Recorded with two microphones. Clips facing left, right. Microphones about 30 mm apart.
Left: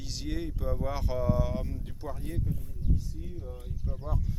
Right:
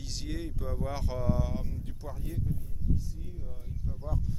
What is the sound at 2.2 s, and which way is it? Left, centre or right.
Speech, left.